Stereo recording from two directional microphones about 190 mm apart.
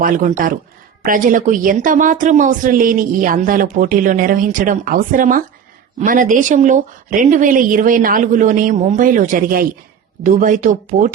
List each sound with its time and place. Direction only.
0.0 s speech: 45° right (ahead or behind)